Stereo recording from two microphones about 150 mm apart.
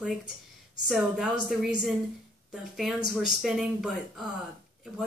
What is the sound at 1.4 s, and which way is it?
Speech, centre (ahead or behind).